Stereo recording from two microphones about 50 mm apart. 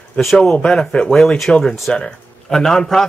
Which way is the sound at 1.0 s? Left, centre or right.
Centre.